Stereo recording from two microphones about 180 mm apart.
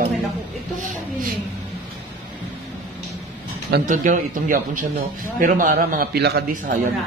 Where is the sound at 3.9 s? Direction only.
45° right (ahead or behind); by 6.7 s 65° right (ahead or behind).